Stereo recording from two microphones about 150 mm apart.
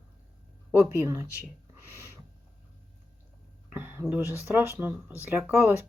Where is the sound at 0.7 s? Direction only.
15° right (ahead or behind).